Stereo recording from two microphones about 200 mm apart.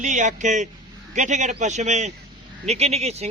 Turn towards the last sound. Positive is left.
turn(degrees=-30)  # may be behind; listen again after turning